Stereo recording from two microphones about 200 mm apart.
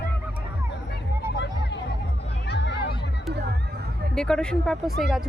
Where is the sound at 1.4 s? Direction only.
60° left (ahead or behind).